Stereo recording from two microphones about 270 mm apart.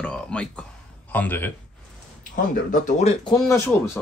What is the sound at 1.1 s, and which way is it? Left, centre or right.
Speech, centre.